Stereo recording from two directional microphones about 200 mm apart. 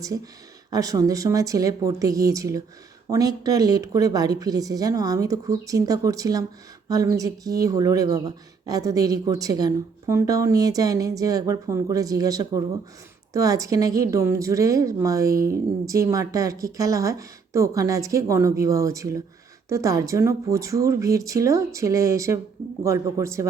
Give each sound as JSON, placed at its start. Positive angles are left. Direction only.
{"t": 0.7, "sound": "speech", "side_deg": -20}